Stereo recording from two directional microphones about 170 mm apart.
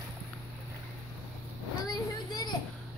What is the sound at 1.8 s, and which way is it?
Vehicle, 25° left (ahead or behind).